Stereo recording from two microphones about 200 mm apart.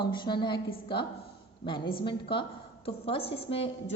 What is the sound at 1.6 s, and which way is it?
A woman's voice, 25° left (ahead or behind).